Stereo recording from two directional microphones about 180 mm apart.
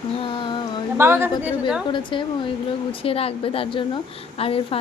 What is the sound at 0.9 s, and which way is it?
Speech, 15° right (ahead or behind).